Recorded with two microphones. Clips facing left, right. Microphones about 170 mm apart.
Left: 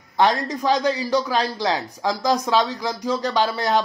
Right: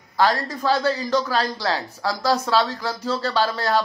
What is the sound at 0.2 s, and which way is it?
A man's voice, 20° left (ahead or behind).